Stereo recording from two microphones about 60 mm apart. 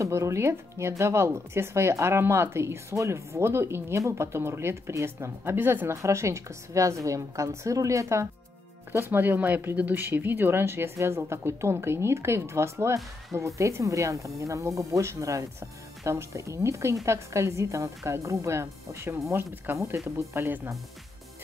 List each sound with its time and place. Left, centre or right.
0.0 s speech: right
5.4 s speech: right
6.0 s a woman's voice: right
9.2 s a woman's voice: right
19.3 s speech: right